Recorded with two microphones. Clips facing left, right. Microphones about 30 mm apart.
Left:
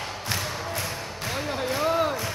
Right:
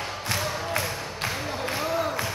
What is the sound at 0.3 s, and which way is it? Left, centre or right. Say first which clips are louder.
Music: right 2 dB; centre.